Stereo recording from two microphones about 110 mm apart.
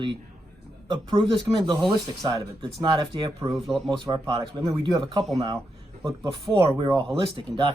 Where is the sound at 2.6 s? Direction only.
45° right (ahead or behind).